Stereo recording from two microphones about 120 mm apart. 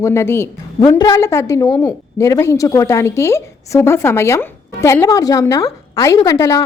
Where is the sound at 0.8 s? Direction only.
35° left (ahead or behind).